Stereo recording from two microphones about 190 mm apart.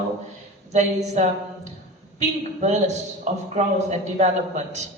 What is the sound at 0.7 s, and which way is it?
Speech, 35° right (ahead or behind).